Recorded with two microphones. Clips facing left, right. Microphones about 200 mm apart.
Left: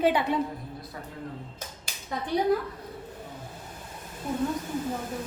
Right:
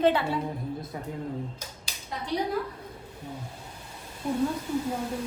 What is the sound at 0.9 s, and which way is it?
Speech, 15° right (ahead or behind).